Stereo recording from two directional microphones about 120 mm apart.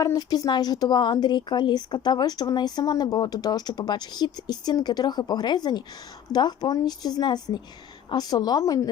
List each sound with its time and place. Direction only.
0.0 s speech: 30° left (ahead or behind)